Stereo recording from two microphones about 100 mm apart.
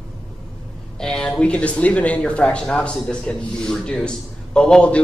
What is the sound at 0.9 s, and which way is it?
Speech, 5° left (ahead or behind).